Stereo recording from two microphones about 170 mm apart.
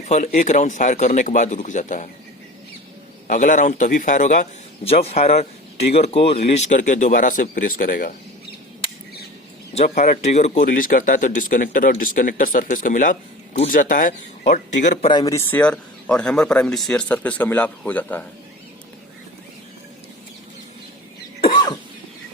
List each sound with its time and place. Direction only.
0.0 s speech: 45° left (ahead or behind)
3.2 s speech: 50° left (ahead or behind)
9.7 s speech: 45° left (ahead or behind)
15.1 s a man's voice: 20° left (ahead or behind)